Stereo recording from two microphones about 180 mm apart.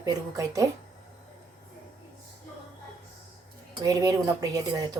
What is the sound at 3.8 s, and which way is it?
Speech, 20° right (ahead or behind).